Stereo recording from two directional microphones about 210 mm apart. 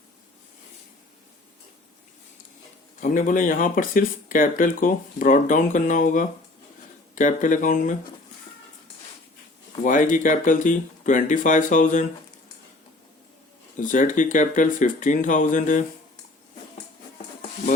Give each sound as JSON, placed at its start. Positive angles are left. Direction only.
{"t": 3.0, "sound": "speech", "side_deg": 40}
{"t": 9.8, "sound": "speech", "side_deg": 40}
{"t": 13.7, "sound": "speech", "side_deg": 40}